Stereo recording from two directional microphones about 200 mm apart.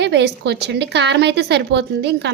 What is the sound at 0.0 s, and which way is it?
A woman's voice, 60° right (ahead or behind).